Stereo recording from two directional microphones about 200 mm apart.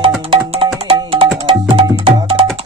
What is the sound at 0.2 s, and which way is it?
Music, 25° right (ahead or behind).